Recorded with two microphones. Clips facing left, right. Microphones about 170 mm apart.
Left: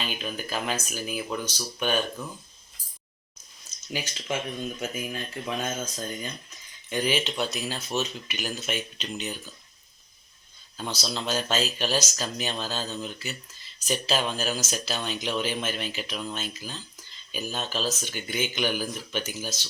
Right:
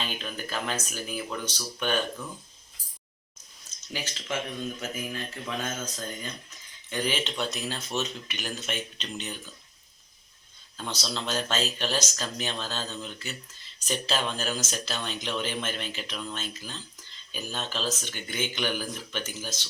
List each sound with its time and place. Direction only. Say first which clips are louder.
0.0 s speech: left 2 dB; 10° left (ahead or behind)
3.9 s speech: left 2 dB; 15° left (ahead or behind)
6.9 s speech: left 3 dB; 10° left (ahead or behind)
10.8 s speech: left 2 dB; 5° left (ahead or behind)